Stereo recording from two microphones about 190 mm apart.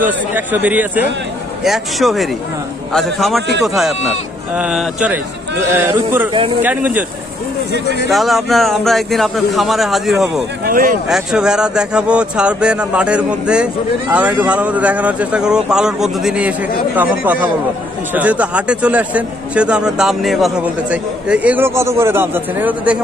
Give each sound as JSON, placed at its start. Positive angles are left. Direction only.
{"t": 0.0, "sound": "speech", "side_deg": -10}
{"t": 8.1, "sound": "speech", "side_deg": 0}
{"t": 10.6, "sound": "speech", "side_deg": -50}
{"t": 11.1, "sound": "speech", "side_deg": -5}